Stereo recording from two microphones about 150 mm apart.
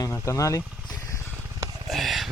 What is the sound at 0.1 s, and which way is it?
Speech, 20° left (ahead or behind).